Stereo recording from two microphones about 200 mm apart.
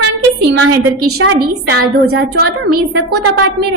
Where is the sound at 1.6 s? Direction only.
55° right (ahead or behind).